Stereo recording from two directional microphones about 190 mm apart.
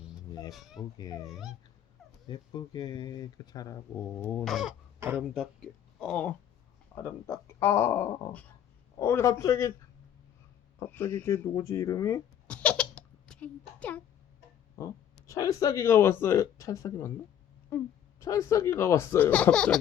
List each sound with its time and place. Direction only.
0.5 s speech: centre (ahead or behind)
0.8 s speech: 20° left (ahead or behind)
1.3 s speech: centre (ahead or behind)
2.2 s speech: 20° left (ahead or behind)
4.2 s speech: 10° left (ahead or behind)
4.9 s speech: 10° right (ahead or behind)
6.0 s speech: 5° left (ahead or behind)
10.8 s a sound: 10° left (ahead or behind)
15.3 s speech: 15° left (ahead or behind)